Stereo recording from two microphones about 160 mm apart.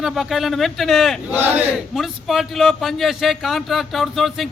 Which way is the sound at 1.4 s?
10° right (ahead or behind).